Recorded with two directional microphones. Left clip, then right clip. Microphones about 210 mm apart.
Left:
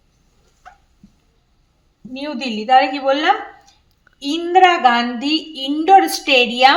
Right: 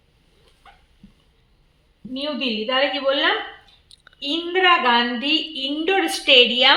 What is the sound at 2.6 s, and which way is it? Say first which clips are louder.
A woman's voice: left 8 dB; 50° left (ahead or behind).